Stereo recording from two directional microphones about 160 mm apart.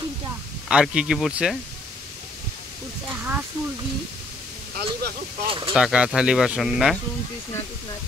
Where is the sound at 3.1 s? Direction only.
10° right (ahead or behind).